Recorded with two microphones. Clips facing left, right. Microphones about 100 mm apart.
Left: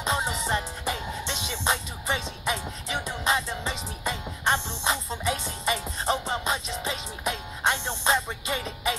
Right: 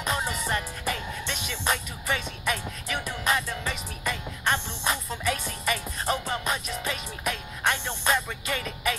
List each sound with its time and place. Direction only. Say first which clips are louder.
0.0 s music: left 1 dB; 25° left (ahead or behind)